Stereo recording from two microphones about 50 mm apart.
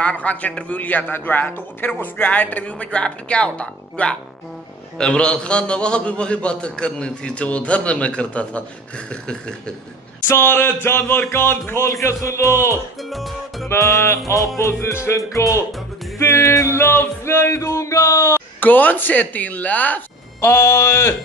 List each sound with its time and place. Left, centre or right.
0.0 s a man's voice: left
10.2 s a sound: left
11.9 s music: left
13.1 s speech: centre
13.7 s music: left
14.7 s music: left
16.2 s music: left
17.5 s music: left
18.6 s speech: left
20.3 s mantra: left